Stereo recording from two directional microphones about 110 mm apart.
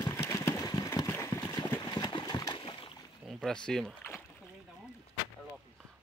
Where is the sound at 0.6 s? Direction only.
35° left (ahead or behind); by 3.0 s 55° left (ahead or behind).